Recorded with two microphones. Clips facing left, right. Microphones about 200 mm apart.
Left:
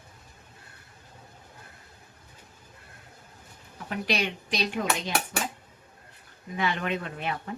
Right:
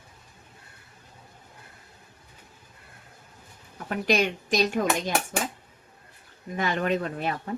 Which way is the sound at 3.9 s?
45° right (ahead or behind).